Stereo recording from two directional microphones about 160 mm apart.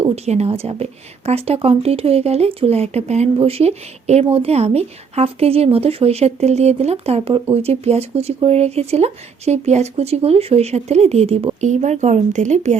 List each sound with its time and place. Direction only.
0.0 s a woman's voice: 40° right (ahead or behind)